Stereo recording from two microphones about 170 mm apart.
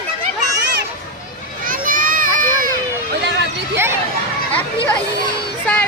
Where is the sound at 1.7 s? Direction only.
55° right (ahead or behind).